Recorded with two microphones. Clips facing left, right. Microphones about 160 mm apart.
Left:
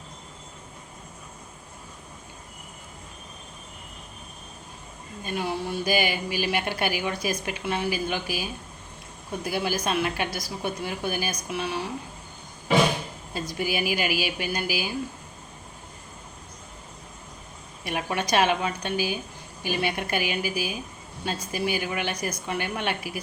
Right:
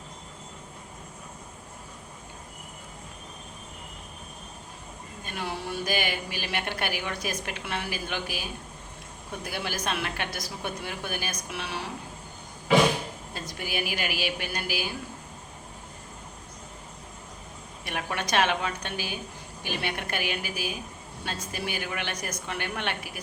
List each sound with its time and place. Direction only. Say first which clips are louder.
5.2 s a woman's voice: left 5 dB; centre (ahead or behind)
13.3 s a woman's voice: left 6 dB; 5° left (ahead or behind)
17.8 s a woman's voice: left 4 dB; 5° left (ahead or behind)